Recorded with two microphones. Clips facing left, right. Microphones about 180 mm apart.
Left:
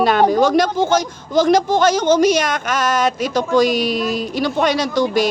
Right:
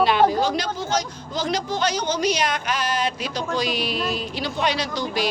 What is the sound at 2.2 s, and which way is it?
A woman's voice, 45° left (ahead or behind).